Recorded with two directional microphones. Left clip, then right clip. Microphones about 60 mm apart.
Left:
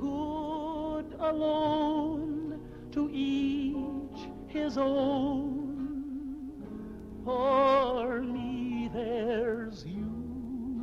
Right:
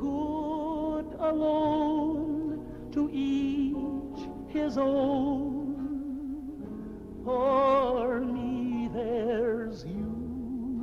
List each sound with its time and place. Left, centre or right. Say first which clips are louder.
0.0 s music: right 2 dB; right
7.4 s music: even; centre
7.8 s music: right 2 dB; right